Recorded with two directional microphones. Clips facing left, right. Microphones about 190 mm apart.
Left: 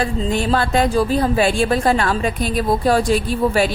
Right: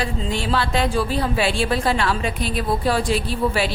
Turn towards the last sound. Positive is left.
turn(degrees=45)  # may be behind; listen again after turning